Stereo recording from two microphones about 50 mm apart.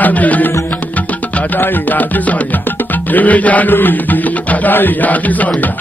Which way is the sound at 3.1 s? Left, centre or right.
Left.